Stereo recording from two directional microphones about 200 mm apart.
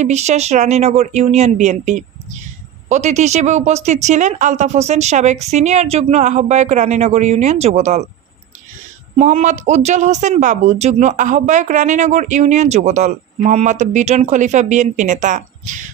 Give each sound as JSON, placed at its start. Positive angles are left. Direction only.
{"t": 0.0, "sound": "speech", "side_deg": -35}
{"t": 9.2, "sound": "speech", "side_deg": -35}